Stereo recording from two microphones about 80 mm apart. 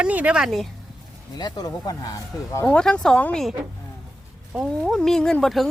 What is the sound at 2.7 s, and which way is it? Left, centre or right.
Speech, centre.